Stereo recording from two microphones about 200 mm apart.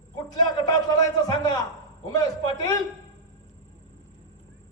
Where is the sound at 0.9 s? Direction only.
20° left (ahead or behind).